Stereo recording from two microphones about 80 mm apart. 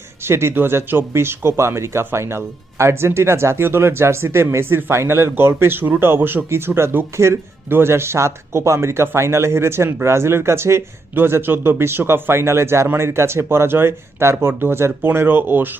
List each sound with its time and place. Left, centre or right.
0.3 s speech: right